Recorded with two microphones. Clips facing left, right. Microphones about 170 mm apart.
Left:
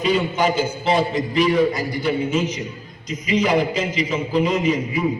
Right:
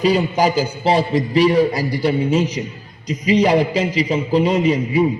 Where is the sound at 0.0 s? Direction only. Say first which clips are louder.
Right 3 dB; 35° right (ahead or behind).